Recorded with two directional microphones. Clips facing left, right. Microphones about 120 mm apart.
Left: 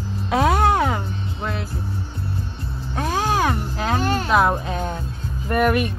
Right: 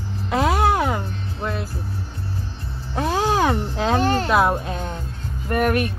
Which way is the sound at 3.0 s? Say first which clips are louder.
Right 2 dB; 15° right (ahead or behind).